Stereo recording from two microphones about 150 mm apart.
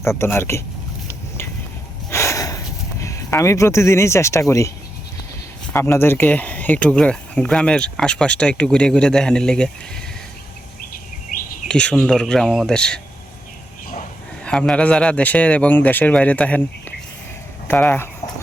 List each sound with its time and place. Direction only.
0.0 s speech: 15° left (ahead or behind)
2.0 s a sound: 20° left (ahead or behind)
3.0 s speech: 20° left (ahead or behind)
5.7 s speech: 15° left (ahead or behind)
11.7 s speech: 5° left (ahead or behind)
14.4 s speech: 5° left (ahead or behind)
17.7 s speech: 15° left (ahead or behind)